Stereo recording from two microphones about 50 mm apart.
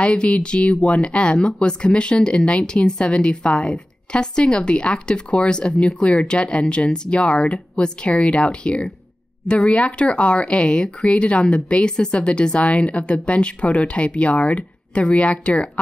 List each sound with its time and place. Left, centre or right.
0.0 s speech: left